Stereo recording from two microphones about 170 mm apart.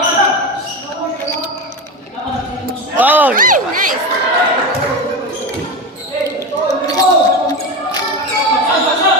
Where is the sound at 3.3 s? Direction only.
50° right (ahead or behind).